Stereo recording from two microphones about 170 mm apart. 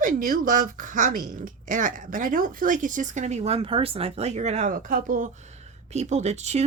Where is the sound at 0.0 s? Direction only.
55° right (ahead or behind).